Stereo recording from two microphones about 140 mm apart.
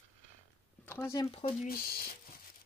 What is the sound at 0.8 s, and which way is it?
Speech, 20° left (ahead or behind).